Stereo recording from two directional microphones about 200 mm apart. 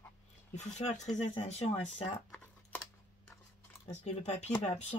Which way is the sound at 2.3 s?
10° left (ahead or behind).